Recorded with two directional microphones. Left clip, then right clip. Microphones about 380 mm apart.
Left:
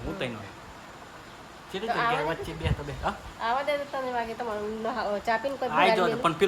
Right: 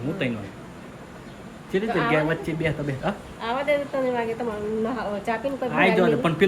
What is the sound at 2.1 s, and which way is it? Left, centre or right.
Speech, centre.